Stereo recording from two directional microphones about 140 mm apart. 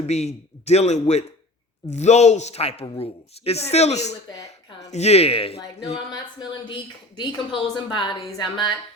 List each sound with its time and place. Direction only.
0.1 s a woman's voice: 50° left (ahead or behind); by 8.7 s 30° left (ahead or behind)